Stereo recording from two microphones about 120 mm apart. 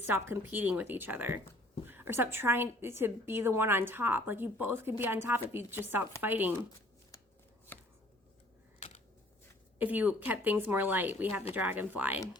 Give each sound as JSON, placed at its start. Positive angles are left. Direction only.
{"t": 0.0, "sound": "a woman's voice", "side_deg": -20}
{"t": 7.7, "sound": "chopping", "side_deg": 15}
{"t": 9.7, "sound": "speech", "side_deg": -15}